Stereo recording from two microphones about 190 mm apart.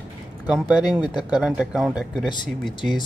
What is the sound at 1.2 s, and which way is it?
Speech, 5° right (ahead or behind).